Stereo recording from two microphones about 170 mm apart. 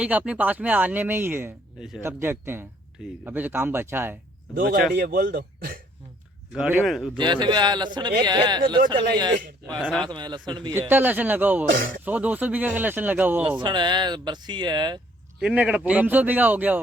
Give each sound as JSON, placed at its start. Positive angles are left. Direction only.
{"t": 0.0, "sound": "speech", "side_deg": -10}
{"t": 4.9, "sound": "speech", "side_deg": -65}
{"t": 6.5, "sound": "speech", "side_deg": -5}
{"t": 7.2, "sound": "speech", "side_deg": -25}
{"t": 9.8, "sound": "speech", "side_deg": 0}
{"t": 10.1, "sound": "speech", "side_deg": -25}
{"t": 10.8, "sound": "speech", "side_deg": -10}
{"t": 11.7, "sound": "speech", "side_deg": -55}
{"t": 12.0, "sound": "speech", "side_deg": -10}
{"t": 13.6, "sound": "speech", "side_deg": -25}
{"t": 15.4, "sound": "speech", "side_deg": -5}